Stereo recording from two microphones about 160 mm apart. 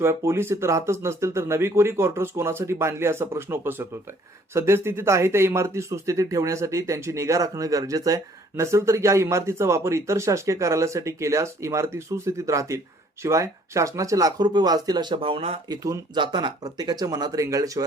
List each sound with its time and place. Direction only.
0.0 s speech: 15° right (ahead or behind); by 15.6 s 40° right (ahead or behind)
15.7 s speech: 25° right (ahead or behind)